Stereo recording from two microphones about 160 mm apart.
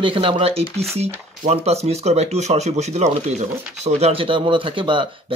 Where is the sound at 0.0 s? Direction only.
35° right (ahead or behind).